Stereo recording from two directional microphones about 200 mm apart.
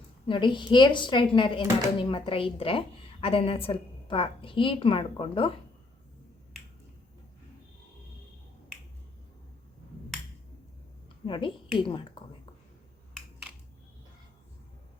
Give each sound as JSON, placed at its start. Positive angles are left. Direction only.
{"t": 0.3, "sound": "a woman's voice", "side_deg": 25}
{"t": 11.3, "sound": "a woman's voice", "side_deg": 25}